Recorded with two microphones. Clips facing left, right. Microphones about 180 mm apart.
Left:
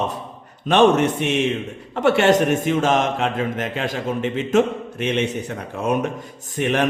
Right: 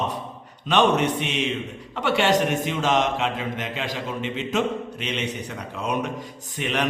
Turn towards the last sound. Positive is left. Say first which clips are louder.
# left 6 dB
turn(degrees=50)  # may be behind; listen again after turning